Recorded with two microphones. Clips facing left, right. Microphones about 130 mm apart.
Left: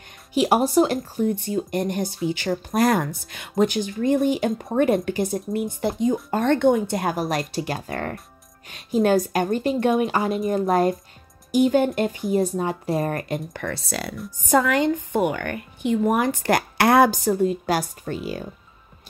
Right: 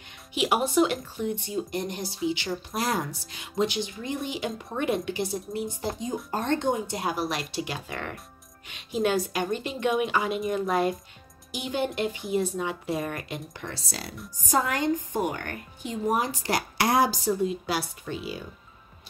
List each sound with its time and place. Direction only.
0.3 s speech: 40° left (ahead or behind)